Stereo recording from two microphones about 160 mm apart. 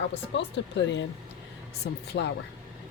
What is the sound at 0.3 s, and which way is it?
Speech, 90° left.